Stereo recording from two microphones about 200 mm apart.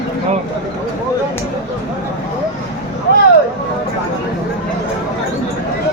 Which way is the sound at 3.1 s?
55° left (ahead or behind).